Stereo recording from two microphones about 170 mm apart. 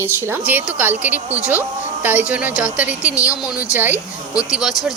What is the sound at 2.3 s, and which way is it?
A woman's voice, 10° right (ahead or behind).